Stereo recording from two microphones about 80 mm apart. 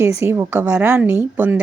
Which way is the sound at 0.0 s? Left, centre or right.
Right.